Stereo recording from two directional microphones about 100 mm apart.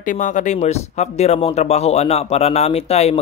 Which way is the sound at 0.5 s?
90° left.